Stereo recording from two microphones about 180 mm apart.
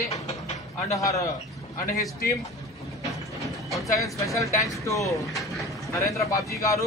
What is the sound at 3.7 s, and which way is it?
Speech, 15° left (ahead or behind).